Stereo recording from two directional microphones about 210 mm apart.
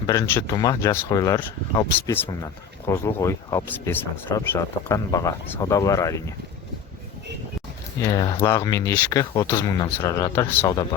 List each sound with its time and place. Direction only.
0.1 s speech: 15° left (ahead or behind)
8.0 s speech: 15° left (ahead or behind)